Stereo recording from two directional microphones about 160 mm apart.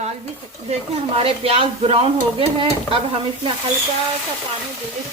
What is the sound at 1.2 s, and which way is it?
Speech, 35° right (ahead or behind).